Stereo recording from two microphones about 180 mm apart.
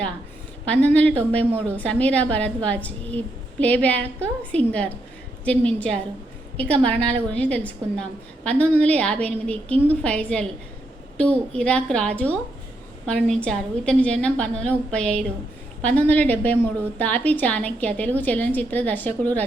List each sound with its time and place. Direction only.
0.7 s a woman's voice: 10° left (ahead or behind)